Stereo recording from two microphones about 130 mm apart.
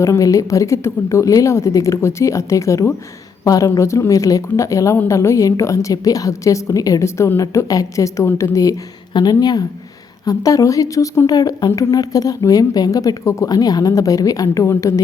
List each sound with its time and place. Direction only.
0.0 s a woman's voice: 25° left (ahead or behind)